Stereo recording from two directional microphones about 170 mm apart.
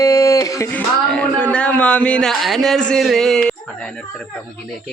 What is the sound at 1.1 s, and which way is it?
A man's voice, 5° left (ahead or behind).